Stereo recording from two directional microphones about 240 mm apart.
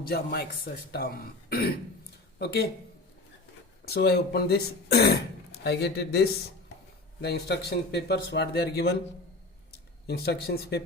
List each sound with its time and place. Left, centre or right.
0.1 s speech: left
3.8 s speech: left
10.1 s speech: left